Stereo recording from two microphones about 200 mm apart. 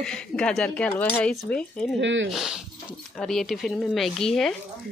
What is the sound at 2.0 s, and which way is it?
Speech, 65° right (ahead or behind).